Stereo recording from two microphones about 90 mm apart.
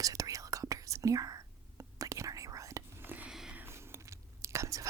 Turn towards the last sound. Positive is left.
turn(degrees=-35)  # may be behind; listen again after turning